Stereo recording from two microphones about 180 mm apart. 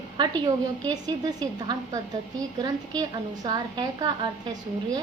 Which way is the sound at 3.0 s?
25° right (ahead or behind).